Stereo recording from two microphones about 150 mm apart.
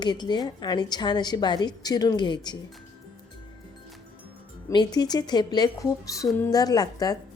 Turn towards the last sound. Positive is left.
turn(degrees=25)  # may be behind; listen again after turning